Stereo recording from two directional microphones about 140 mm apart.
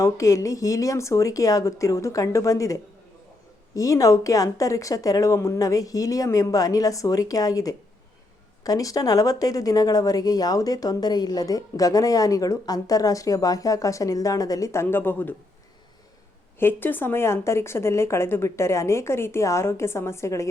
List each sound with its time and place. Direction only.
0.0 s speech: 20° left (ahead or behind)
16.6 s speech: 15° left (ahead or behind)